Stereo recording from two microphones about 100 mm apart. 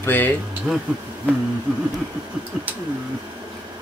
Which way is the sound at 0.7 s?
5° left (ahead or behind).